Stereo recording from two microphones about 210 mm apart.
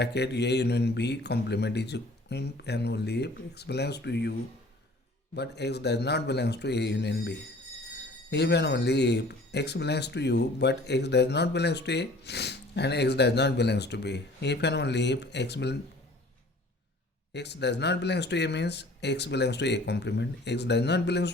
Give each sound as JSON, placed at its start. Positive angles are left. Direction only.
{"t": 0.0, "sound": "speech", "side_deg": 55}
{"t": 17.3, "sound": "speech", "side_deg": 55}